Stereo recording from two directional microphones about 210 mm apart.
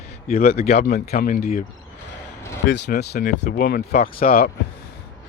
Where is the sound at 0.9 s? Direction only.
35° left (ahead or behind).